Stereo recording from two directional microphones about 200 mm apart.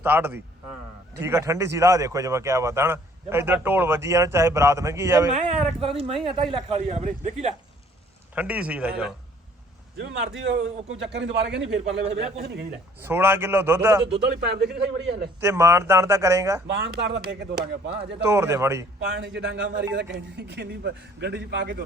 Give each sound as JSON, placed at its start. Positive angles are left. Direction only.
{"t": 0.0, "sound": "speech", "side_deg": -10}
{"t": 5.3, "sound": "speech", "side_deg": -35}
{"t": 8.4, "sound": "speech", "side_deg": -5}
{"t": 10.0, "sound": "a man's voice", "side_deg": -60}
{"t": 13.1, "sound": "speech", "side_deg": -10}
{"t": 14.0, "sound": "a man's voice", "side_deg": -55}
{"t": 15.4, "sound": "speech", "side_deg": -15}
{"t": 16.6, "sound": "a man's voice", "side_deg": -60}
{"t": 18.3, "sound": "speech", "side_deg": -15}
{"t": 19.0, "sound": "a man's voice", "side_deg": -60}